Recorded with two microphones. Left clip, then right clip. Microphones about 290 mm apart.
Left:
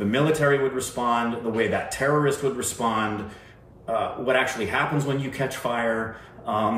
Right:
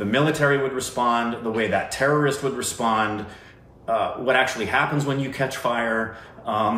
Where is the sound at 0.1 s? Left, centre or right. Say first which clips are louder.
Right 1 dB; centre.